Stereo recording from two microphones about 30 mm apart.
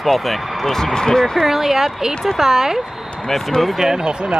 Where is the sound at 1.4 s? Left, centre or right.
Centre.